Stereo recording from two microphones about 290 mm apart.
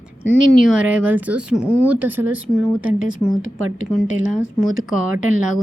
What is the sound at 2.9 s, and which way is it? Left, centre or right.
Speech, right.